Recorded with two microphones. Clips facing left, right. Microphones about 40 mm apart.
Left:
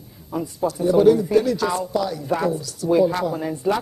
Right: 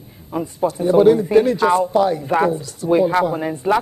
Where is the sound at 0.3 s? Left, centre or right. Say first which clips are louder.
Right 3 dB; right.